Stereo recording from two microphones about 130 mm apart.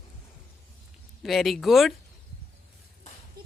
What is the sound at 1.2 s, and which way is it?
Speech, centre (ahead or behind).